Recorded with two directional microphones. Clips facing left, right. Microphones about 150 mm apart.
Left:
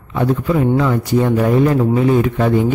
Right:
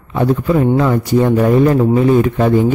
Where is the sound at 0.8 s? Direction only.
40° right (ahead or behind).